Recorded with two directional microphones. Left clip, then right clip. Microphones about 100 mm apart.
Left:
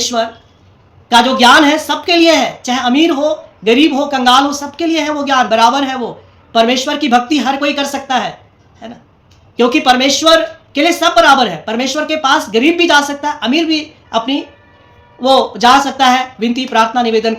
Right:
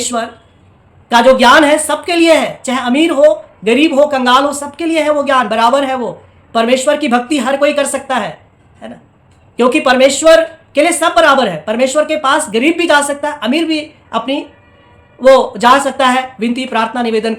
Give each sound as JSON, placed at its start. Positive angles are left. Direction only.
{"t": 0.0, "sound": "a woman's voice", "side_deg": -35}